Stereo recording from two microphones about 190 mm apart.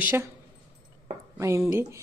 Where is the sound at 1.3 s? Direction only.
15° right (ahead or behind).